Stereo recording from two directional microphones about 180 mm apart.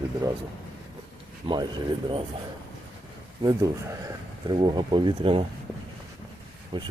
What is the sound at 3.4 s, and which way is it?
Speech, 20° right (ahead or behind).